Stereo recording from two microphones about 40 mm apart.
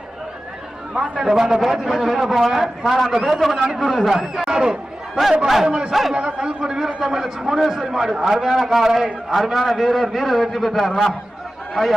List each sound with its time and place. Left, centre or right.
0.9 s a man's voice: right; by 4.4 s centre
4.4 s a man's voice: centre
5.1 s a man's voice: centre
5.6 s a man's voice: right
5.9 s a man's voice: centre
6.1 s a man's voice: right; by 11.9 s centre